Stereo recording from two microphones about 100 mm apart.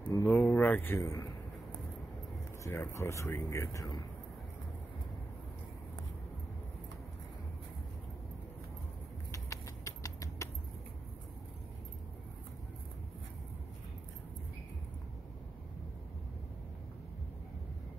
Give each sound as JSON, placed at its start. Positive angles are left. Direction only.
{"t": 0.0, "sound": "a sound", "side_deg": 20}
{"t": 2.6, "sound": "speech", "side_deg": 25}
{"t": 9.3, "sound": "rodents", "side_deg": 35}